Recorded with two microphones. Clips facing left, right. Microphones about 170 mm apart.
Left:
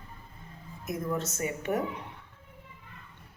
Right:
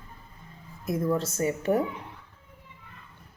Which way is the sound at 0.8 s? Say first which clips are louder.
Right 5 dB; 35° right (ahead or behind).